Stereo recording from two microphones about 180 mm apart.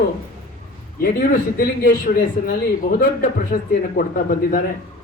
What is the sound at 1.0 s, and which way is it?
Speech, 55° left (ahead or behind).